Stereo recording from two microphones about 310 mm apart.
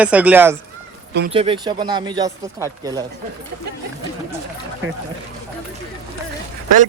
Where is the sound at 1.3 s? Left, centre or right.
Centre.